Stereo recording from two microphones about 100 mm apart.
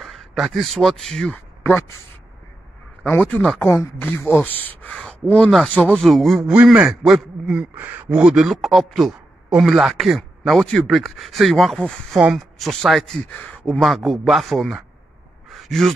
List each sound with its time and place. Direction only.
0.0 s a man's voice: centre (ahead or behind)
1.6 s speech: 25° left (ahead or behind)
3.1 s speech: 20° left (ahead or behind)
4.9 s speech: 10° left (ahead or behind)
6.5 s a man's voice: 15° right (ahead or behind); by 13.7 s 15° left (ahead or behind)
13.7 s speech: centre (ahead or behind)
15.5 s a sound: centre (ahead or behind)